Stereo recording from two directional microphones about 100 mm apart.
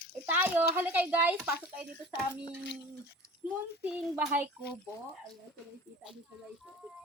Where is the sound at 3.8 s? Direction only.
10° right (ahead or behind).